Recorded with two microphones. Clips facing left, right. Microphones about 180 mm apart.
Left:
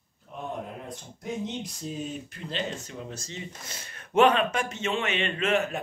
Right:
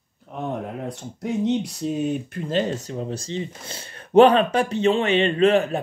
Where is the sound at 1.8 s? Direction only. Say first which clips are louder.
Right 10 dB; 80° right.